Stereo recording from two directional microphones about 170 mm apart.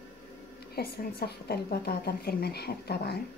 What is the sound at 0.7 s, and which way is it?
A woman's voice, 65° left (ahead or behind).